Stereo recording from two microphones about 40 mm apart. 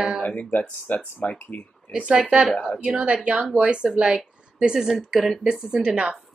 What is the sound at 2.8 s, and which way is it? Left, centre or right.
Speech, centre.